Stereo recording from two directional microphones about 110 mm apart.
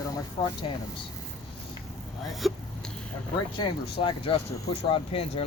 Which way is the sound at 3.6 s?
50° left (ahead or behind).